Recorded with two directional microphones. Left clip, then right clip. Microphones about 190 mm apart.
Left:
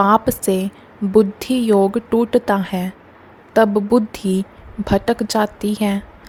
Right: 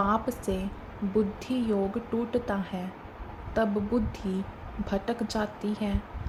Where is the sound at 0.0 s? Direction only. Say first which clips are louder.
Left 13 dB; 60° left (ahead or behind).